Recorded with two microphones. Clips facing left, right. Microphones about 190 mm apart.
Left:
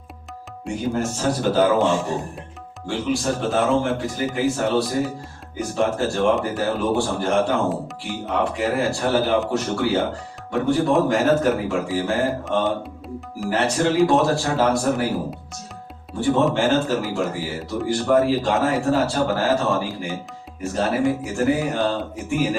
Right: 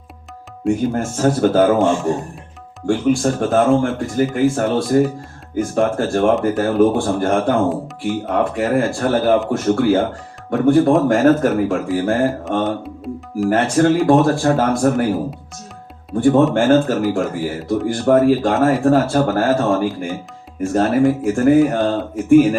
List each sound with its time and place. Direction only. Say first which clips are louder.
0.6 s speech: right 6 dB; 50° right (ahead or behind)
7.7 s speech: right 5 dB; centre (ahead or behind)
8.3 s speech: right 4 dB; 50° right (ahead or behind)
16.1 s speech: right 6 dB; 50° right (ahead or behind)